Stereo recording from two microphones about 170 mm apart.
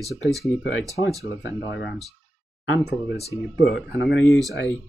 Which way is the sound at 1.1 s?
15° right (ahead or behind).